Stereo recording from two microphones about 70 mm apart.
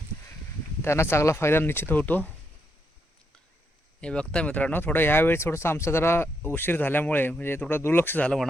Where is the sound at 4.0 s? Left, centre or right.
Centre; by 8.3 s left.